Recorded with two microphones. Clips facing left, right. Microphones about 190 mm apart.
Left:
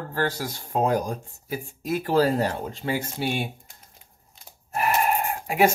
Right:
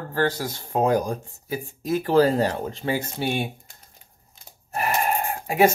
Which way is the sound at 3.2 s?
50° right (ahead or behind).